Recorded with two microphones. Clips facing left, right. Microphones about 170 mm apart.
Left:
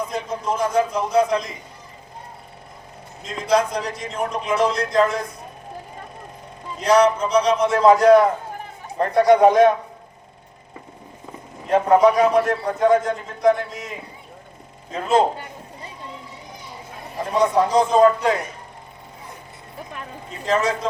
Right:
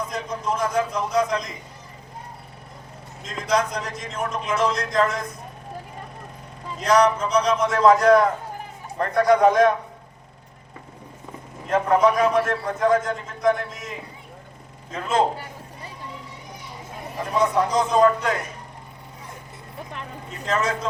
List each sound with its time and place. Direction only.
0.1 s speech: 30° left (ahead or behind)
3.5 s speech: 30° left (ahead or behind)
6.8 s a man's voice: 30° left (ahead or behind)
12.0 s speech: 35° left (ahead or behind)
15.0 s a sound: 25° left (ahead or behind)
17.2 s speech: 30° left (ahead or behind)
20.4 s speech: 30° left (ahead or behind)